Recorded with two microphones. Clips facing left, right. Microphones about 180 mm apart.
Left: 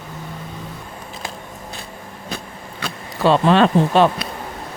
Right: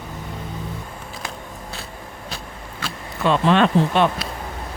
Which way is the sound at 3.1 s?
35° left (ahead or behind).